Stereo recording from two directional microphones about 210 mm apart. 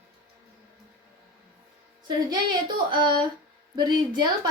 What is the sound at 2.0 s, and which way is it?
A woman's voice, 20° right (ahead or behind).